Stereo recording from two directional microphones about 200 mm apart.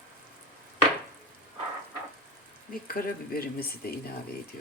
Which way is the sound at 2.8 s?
45° left (ahead or behind).